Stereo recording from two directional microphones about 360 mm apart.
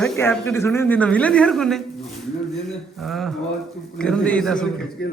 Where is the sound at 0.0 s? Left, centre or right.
Centre.